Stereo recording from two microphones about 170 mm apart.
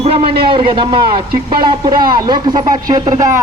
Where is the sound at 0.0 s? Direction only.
35° right (ahead or behind).